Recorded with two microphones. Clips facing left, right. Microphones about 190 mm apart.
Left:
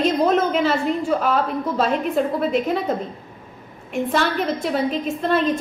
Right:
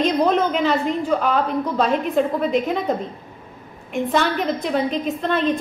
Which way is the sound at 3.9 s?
Centre (ahead or behind).